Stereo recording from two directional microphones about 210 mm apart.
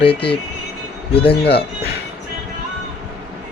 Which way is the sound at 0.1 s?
25° left (ahead or behind).